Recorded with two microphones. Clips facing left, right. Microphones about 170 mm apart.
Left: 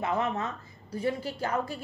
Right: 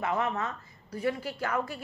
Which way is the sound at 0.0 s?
25° left (ahead or behind).